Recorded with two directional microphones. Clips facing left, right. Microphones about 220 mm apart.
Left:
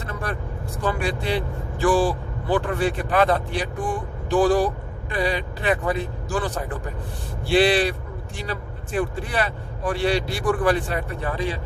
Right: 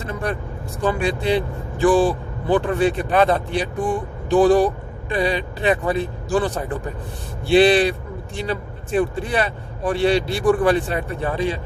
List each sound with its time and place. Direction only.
0.0 s vehicle: 20° right (ahead or behind)
0.8 s speech: 20° right (ahead or behind)